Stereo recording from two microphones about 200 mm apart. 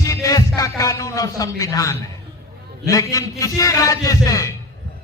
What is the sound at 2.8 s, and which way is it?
A man's voice, 15° left (ahead or behind).